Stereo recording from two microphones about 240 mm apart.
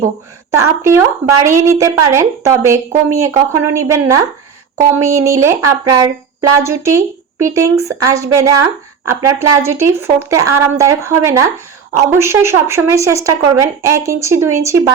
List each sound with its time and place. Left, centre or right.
0.5 s a woman's voice: centre